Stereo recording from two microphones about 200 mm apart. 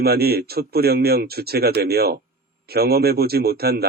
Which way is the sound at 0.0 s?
50° right (ahead or behind).